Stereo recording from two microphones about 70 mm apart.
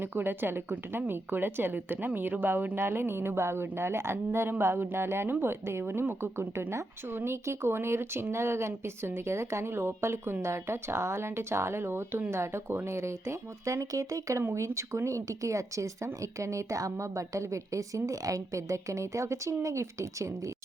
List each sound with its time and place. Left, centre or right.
0.0 s a woman's voice: right